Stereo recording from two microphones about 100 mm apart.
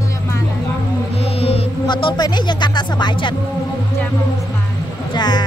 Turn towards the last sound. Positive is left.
turn(degrees=45)  # may be behind; listen again after turning